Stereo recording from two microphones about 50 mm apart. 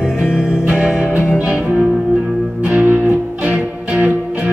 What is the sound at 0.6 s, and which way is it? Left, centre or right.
Music, right.